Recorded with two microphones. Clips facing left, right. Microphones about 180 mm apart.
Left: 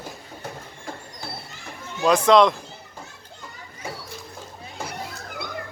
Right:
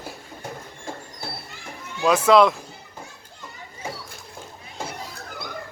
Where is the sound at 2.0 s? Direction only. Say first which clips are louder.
Even; 5° right (ahead or behind).